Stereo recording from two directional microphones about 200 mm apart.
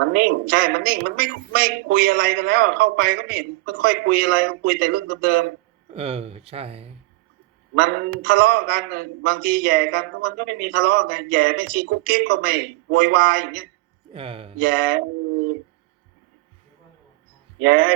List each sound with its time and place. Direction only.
0.1 s a man's voice: 50° right (ahead or behind)
5.9 s speech: 30° right (ahead or behind)
7.8 s a man's voice: 50° right (ahead or behind)
14.1 s speech: 25° right (ahead or behind)
14.6 s a man's voice: 50° right (ahead or behind)
17.6 s a man's voice: 50° right (ahead or behind)